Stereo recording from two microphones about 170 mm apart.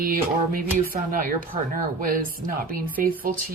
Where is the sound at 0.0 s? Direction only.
60° right (ahead or behind).